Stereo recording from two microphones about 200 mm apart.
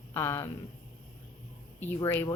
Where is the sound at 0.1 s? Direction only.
15° left (ahead or behind).